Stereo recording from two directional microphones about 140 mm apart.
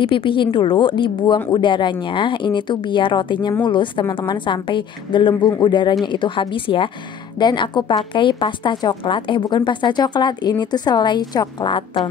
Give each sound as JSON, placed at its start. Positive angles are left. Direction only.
{"t": 0.0, "sound": "a woman's voice", "side_deg": 35}